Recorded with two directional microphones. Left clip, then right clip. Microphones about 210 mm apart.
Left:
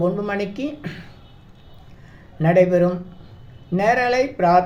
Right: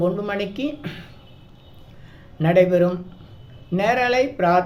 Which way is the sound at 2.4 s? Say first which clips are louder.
Left 1 dB; 5° left (ahead or behind).